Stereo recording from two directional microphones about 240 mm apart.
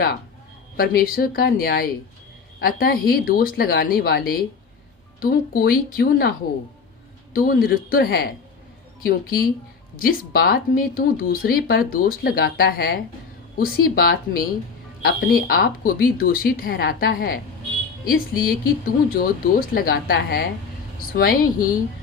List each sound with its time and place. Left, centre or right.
0.8 s speech: left
7.3 s speech: left